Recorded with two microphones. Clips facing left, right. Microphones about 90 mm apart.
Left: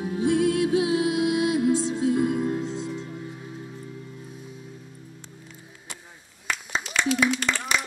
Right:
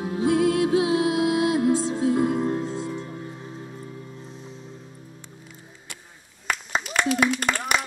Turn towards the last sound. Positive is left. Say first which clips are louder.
# right 2 dB
turn(degrees=-55)  # may be behind; listen again after turning